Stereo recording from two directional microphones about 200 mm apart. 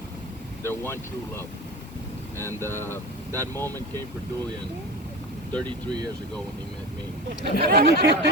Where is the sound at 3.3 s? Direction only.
15° right (ahead or behind).